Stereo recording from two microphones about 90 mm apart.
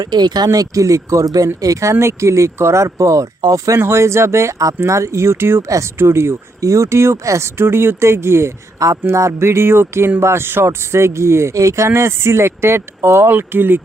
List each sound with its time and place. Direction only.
0.0 s speech: 50° right (ahead or behind)
3.8 s speech: 30° right (ahead or behind)